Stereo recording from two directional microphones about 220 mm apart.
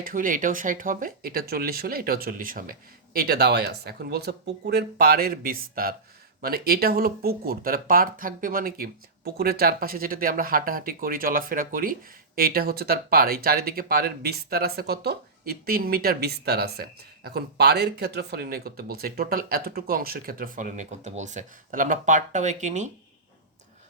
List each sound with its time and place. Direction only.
0.0 s speech: 40° right (ahead or behind)